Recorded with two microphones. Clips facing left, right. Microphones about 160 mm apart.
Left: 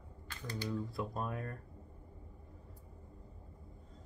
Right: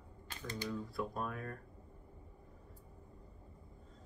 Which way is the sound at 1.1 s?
30° left (ahead or behind).